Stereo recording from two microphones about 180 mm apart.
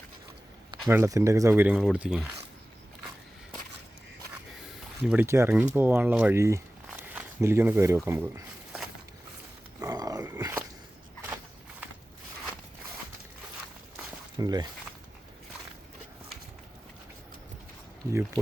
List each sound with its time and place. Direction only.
0.9 s speech: 15° right (ahead or behind)
5.0 s speech: 10° right (ahead or behind)
9.8 s dog: 20° right (ahead or behind)
14.3 s speech: 20° right (ahead or behind)